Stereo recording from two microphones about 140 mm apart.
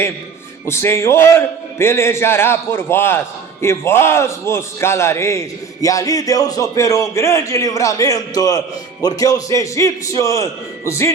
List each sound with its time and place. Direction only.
0.6 s a man's voice: 20° left (ahead or behind)